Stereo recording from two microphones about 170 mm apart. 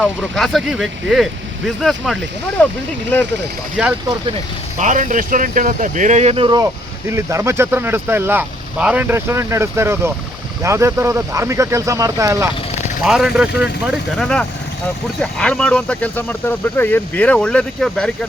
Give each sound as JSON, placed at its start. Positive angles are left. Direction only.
{"t": 0.0, "sound": "speech", "side_deg": 0}
{"t": 3.8, "sound": "speech", "side_deg": -5}
{"t": 4.8, "sound": "speech", "side_deg": -45}
{"t": 7.1, "sound": "speech", "side_deg": -15}
{"t": 13.0, "sound": "speech", "side_deg": -5}
{"t": 14.2, "sound": "speech", "side_deg": 5}